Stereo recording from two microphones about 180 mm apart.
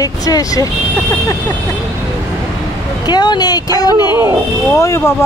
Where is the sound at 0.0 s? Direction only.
20° left (ahead or behind).